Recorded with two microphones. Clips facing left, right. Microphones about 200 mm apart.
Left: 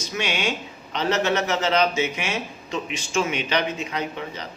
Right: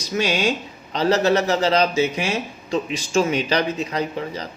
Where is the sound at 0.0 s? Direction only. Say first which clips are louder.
Right 5 dB; 35° right (ahead or behind).